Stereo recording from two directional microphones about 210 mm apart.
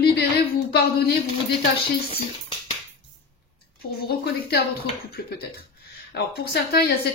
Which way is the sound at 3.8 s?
45° left (ahead or behind).